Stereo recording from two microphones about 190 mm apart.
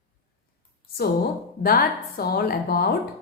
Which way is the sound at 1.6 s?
50° left (ahead or behind).